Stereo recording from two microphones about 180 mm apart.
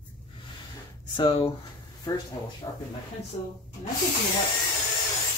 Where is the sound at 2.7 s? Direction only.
25° left (ahead or behind).